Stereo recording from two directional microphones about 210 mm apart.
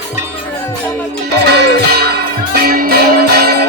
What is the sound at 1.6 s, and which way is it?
Music, 50° right (ahead or behind).